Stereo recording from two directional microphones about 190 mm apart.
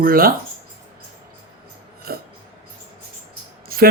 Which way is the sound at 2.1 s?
55° right (ahead or behind).